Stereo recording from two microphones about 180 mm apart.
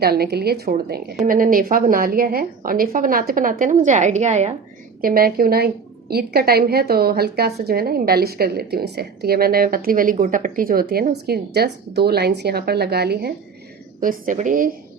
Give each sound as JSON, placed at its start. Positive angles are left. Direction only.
{"t": 0.0, "sound": "a woman's voice", "side_deg": -60}
{"t": 4.9, "sound": "a woman's voice", "side_deg": -55}
{"t": 14.0, "sound": "a woman's voice", "side_deg": -50}